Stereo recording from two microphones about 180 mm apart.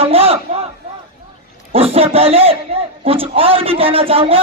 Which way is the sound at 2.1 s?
35° right (ahead or behind).